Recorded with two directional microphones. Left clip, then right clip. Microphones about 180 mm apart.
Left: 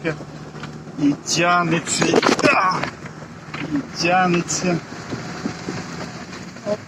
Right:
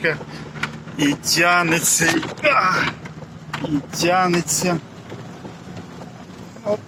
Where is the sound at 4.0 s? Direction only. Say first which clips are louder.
Even; 25° right (ahead or behind).